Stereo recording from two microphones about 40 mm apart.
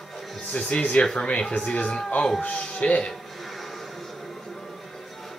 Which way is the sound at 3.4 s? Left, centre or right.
Centre.